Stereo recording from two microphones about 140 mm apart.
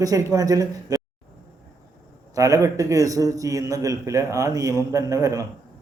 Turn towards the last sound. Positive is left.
turn(degrees=-25)  # may be behind; listen again after turning